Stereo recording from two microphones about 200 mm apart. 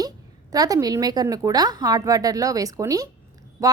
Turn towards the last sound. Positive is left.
turn(degrees=-15)  # may be behind; listen again after turning